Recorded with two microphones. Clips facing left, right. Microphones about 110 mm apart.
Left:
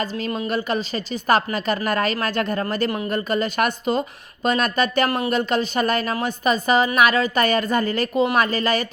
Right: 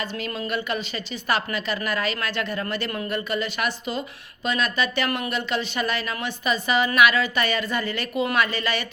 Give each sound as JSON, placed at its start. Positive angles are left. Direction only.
{"t": 0.0, "sound": "a woman's voice", "side_deg": 35}